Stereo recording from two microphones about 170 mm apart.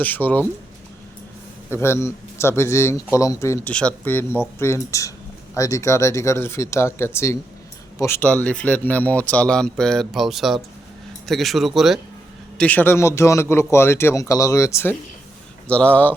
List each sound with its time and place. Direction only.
0.0 s a man's voice: 10° left (ahead or behind)
1.7 s a man's voice: 15° left (ahead or behind)